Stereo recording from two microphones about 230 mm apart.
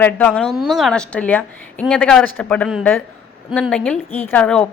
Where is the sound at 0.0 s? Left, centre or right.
Centre.